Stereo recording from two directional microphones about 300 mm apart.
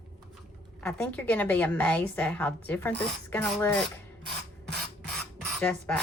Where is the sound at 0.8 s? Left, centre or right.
Centre.